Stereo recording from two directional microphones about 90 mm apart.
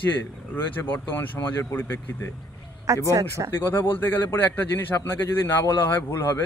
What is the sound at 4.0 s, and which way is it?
Speech, 20° left (ahead or behind).